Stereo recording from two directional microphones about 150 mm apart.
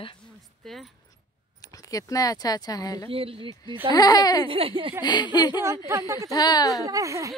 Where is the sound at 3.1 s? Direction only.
40° right (ahead or behind).